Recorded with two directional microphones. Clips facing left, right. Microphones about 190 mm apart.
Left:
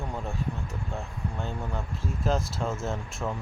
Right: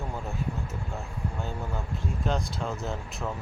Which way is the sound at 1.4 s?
Centre (ahead or behind).